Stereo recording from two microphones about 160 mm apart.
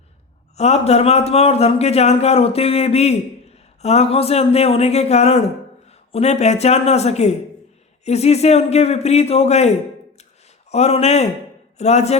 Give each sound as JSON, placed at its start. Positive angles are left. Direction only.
{"t": 0.5, "sound": "a man's voice", "side_deg": 40}